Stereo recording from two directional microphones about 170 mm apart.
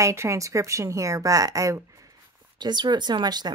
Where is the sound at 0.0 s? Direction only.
15° right (ahead or behind).